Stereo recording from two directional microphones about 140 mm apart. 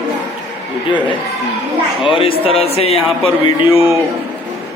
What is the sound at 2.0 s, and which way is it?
Speech, 40° left (ahead or behind).